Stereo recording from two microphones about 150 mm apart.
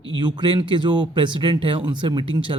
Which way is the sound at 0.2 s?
30° right (ahead or behind).